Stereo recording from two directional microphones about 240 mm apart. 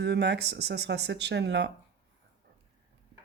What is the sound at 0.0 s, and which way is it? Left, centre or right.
Speech, right.